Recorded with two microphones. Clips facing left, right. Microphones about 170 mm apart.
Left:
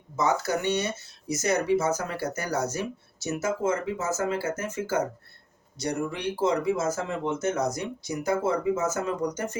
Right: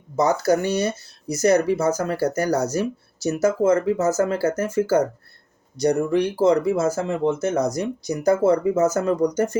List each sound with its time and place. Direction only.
0.2 s speech: 40° right (ahead or behind)